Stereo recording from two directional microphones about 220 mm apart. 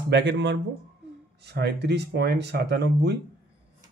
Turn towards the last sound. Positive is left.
turn(degrees=-50)  # may be behind; listen again after turning